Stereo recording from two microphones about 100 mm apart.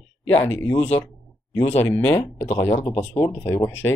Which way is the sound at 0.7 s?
90° left.